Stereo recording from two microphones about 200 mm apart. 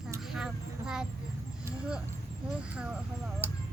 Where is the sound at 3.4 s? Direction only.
10° right (ahead or behind).